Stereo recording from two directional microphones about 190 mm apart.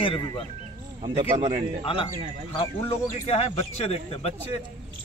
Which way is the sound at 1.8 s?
25° left (ahead or behind).